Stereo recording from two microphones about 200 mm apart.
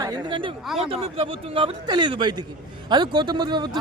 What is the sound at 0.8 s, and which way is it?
A man's voice, 30° right (ahead or behind).